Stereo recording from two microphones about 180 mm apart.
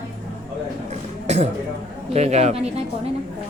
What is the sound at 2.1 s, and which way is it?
Speech, 40° right (ahead or behind).